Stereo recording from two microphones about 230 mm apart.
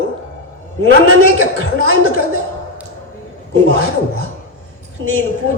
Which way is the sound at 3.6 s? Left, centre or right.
Right.